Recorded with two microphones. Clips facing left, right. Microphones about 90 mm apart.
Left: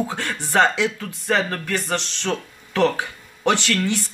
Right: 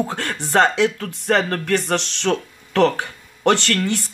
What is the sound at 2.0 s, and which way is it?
Speech, 70° right (ahead or behind).